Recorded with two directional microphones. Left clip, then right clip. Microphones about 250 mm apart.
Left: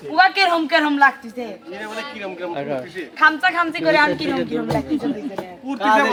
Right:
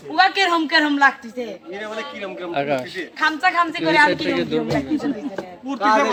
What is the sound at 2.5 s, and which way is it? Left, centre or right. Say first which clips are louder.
Speech: right 6 dB; right.